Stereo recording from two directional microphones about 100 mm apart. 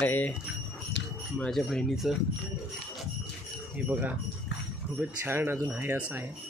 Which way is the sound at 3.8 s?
15° right (ahead or behind).